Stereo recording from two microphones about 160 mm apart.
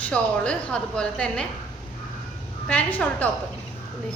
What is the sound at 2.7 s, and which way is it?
Speech, 10° left (ahead or behind).